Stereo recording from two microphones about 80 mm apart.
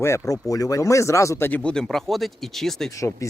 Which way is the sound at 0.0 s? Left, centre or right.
Left.